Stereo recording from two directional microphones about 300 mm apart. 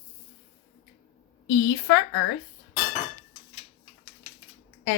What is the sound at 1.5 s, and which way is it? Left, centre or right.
Speech, left.